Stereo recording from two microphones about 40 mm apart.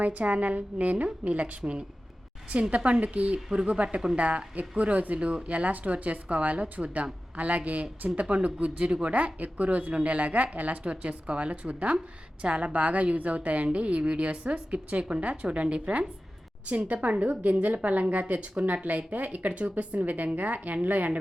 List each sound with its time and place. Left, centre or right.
0.0 s speech: right